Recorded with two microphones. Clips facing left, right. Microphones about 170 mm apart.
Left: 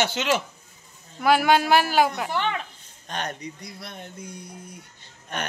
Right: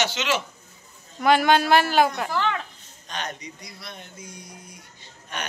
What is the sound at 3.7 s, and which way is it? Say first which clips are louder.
Speech: left 3 dB; 55° left (ahead or behind).